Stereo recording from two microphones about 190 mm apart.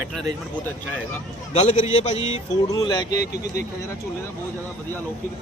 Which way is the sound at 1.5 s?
35° left (ahead or behind).